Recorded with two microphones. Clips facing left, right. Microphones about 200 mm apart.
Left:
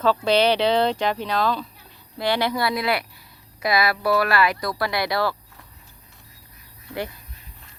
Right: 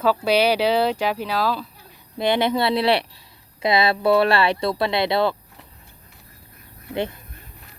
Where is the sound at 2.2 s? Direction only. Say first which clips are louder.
Right 3 dB; 20° right (ahead or behind).